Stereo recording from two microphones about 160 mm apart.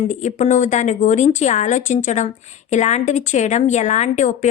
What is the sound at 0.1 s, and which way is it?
Speech, 50° left (ahead or behind).